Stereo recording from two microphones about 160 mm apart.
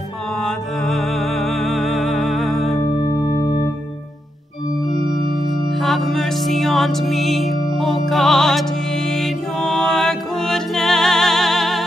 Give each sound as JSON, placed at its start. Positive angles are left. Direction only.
{"t": 0.4, "sound": "music", "side_deg": 0}
{"t": 2.8, "sound": "music", "side_deg": 30}
{"t": 5.8, "sound": "music", "side_deg": 0}